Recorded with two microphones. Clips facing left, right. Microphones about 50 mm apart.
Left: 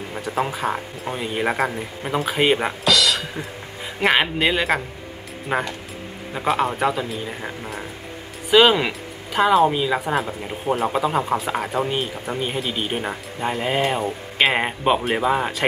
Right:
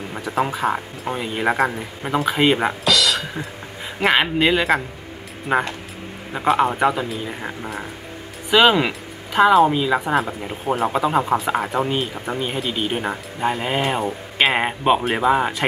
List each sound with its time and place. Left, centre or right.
0.4 s speech: centre
7.1 s speech: centre
13.0 s speech: centre